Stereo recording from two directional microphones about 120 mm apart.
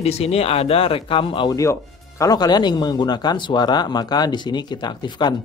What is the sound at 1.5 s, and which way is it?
Speech, 25° left (ahead or behind).